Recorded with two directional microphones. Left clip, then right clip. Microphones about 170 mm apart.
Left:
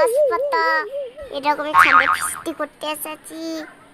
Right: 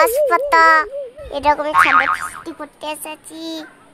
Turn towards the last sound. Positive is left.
turn(degrees=-15)  # may be behind; listen again after turning